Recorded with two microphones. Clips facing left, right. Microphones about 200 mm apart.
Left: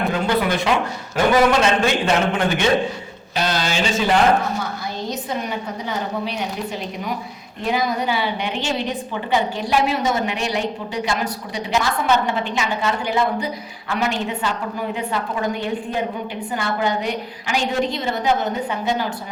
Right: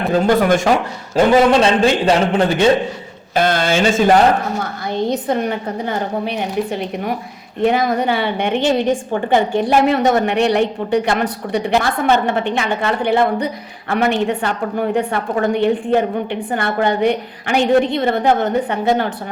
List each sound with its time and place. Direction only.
0.1 s speech: 45° right (ahead or behind)
1.1 s a man's voice: 30° right (ahead or behind)
3.3 s a woman's voice: 50° right (ahead or behind)